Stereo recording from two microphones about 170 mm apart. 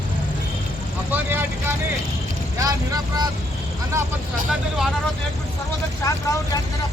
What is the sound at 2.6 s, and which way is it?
Speech, 20° right (ahead or behind).